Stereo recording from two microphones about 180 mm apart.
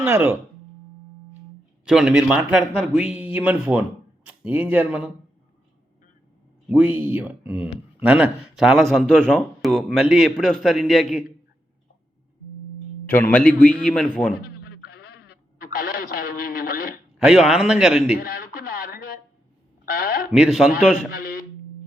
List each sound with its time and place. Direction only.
0.0 s speech: 15° right (ahead or behind)
1.8 s speech: 5° right (ahead or behind)
6.7 s speech: 10° right (ahead or behind)
13.3 s a man's voice: 10° left (ahead or behind)
14.4 s a sound: 65° left (ahead or behind)
17.2 s speech: centre (ahead or behind)
18.2 s radio: 55° left (ahead or behind)
19.8 s a man's voice: 55° left (ahead or behind)
20.3 s speech: centre (ahead or behind)